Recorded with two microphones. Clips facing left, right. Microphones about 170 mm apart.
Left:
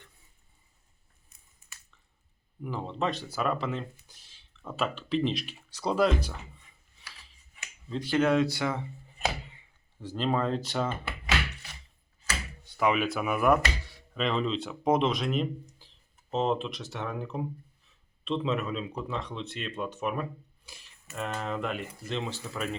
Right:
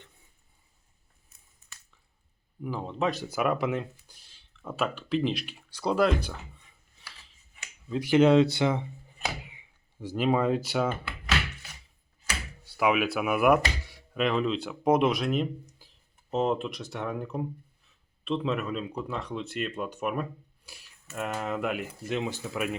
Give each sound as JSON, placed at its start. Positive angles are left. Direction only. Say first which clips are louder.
{"t": 2.6, "sound": "speech", "louder": "right 2 dB", "side_deg": -5}
{"t": 4.1, "sound": "speech", "louder": "even", "side_deg": 0}
{"t": 7.9, "sound": "speech", "louder": "right 5 dB", "side_deg": -10}
{"t": 9.5, "sound": "speech", "louder": "right 1 dB", "side_deg": -10}
{"t": 12.6, "sound": "speech", "louder": "right 1 dB", "side_deg": -5}